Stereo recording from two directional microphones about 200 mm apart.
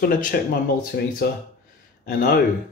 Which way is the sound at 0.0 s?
45° left (ahead or behind).